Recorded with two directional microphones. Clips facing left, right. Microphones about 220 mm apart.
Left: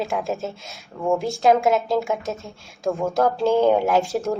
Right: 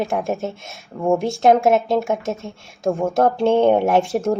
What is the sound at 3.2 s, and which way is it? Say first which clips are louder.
Speech: right 2 dB; 25° right (ahead or behind).